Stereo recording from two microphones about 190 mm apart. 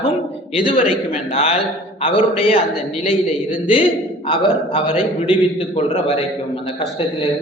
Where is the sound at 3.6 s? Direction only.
30° left (ahead or behind).